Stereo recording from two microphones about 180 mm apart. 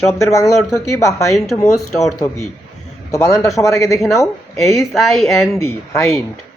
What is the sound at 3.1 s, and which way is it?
Speech, 15° left (ahead or behind).